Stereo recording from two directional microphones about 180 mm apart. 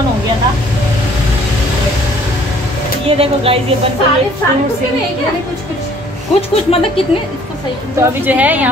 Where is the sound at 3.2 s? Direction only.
30° right (ahead or behind).